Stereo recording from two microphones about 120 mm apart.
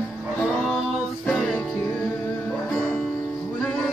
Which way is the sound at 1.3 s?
Centre (ahead or behind).